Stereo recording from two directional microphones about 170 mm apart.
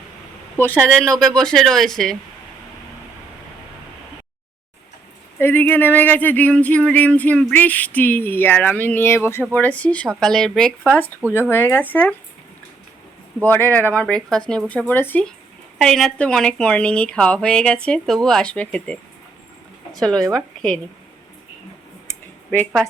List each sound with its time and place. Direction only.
0.6 s a woman's voice: 10° left (ahead or behind)
5.4 s a sound: 10° left (ahead or behind)
10.2 s a woman's voice: 5° left (ahead or behind)
11.3 s a sound: 10° left (ahead or behind)
13.7 s a sound: 10° left (ahead or behind)
15.8 s a woman's voice: 5° left (ahead or behind)
20.1 s a woman's voice: 20° right (ahead or behind)
20.6 s speech: 5° left (ahead or behind)
22.5 s a woman's voice: 5° left (ahead or behind)